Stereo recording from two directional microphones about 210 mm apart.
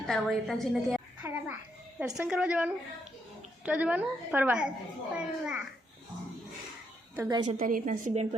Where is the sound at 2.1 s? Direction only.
5° right (ahead or behind).